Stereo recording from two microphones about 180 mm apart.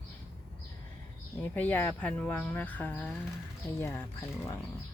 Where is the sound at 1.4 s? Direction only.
10° left (ahead or behind).